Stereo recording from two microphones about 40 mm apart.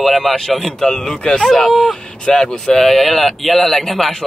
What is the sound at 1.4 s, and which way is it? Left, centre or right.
Speech, centre.